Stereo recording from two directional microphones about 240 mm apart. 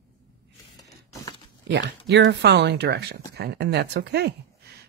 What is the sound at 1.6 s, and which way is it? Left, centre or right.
Speech, right.